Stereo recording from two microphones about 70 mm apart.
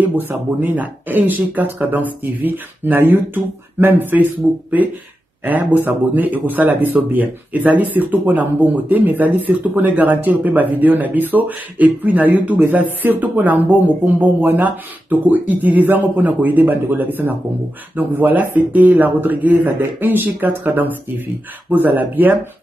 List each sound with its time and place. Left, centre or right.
0.1 s speech: right